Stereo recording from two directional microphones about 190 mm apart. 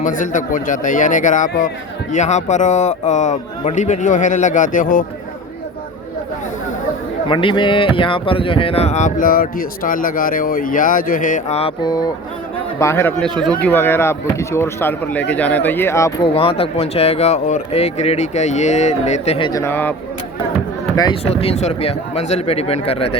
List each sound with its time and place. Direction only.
0.0 s a man's voice: 40° left (ahead or behind)
7.3 s speech: 25° left (ahead or behind)
16.3 s speech: 30° left (ahead or behind)
19.5 s speech: 15° left (ahead or behind)
20.9 s speech: 20° left (ahead or behind)
21.2 s speech: 35° left (ahead or behind)